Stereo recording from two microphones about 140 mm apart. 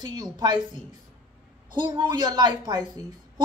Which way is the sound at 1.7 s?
30° right (ahead or behind).